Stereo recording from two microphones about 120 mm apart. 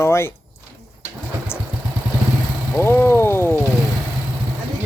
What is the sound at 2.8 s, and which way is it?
Speech, 20° left (ahead or behind).